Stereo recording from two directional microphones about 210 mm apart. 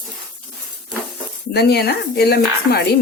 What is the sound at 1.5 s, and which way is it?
Speech, 50° left (ahead or behind).